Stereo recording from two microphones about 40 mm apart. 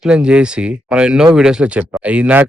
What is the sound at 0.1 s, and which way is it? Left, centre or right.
Speech, right.